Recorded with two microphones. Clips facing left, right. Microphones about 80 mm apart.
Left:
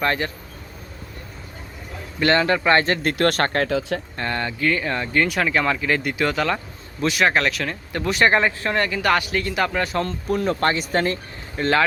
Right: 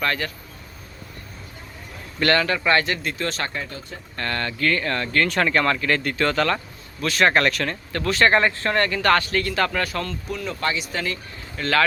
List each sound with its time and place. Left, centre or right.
0.0 s speech: left
2.1 s speech: centre; by 4.0 s left
4.2 s speech: centre
7.9 s speech: centre
10.2 s speech: left